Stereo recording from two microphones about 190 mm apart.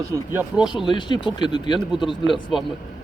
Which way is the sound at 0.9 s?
25° left (ahead or behind).